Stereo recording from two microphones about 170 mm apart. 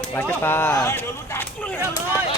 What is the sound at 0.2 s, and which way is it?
Speech, 15° left (ahead or behind).